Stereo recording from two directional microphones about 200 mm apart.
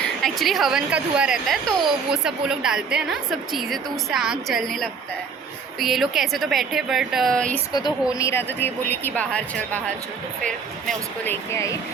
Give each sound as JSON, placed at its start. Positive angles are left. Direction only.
{"t": 0.0, "sound": "speech", "side_deg": 0}
{"t": 7.7, "sound": "a woman's voice", "side_deg": 20}